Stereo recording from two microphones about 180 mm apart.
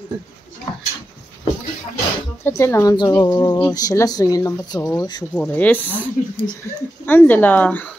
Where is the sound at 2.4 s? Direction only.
15° left (ahead or behind).